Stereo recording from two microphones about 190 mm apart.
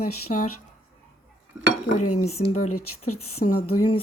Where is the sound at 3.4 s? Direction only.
45° left (ahead or behind).